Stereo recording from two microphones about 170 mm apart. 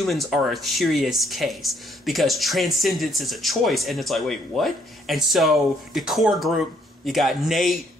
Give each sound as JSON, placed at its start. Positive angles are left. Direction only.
{"t": 0.0, "sound": "speech", "side_deg": 0}